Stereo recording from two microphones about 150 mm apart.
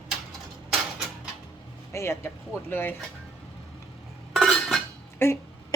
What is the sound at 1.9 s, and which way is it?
Speech, 20° left (ahead or behind).